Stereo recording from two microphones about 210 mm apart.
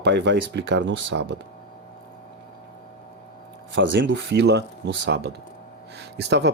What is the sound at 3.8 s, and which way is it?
Speech, 55° right (ahead or behind).